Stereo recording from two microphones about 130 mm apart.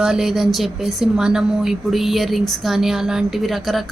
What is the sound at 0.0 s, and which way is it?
Speech, 5° right (ahead or behind).